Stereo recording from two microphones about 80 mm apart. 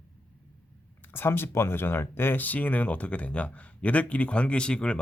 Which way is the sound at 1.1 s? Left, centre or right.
Left.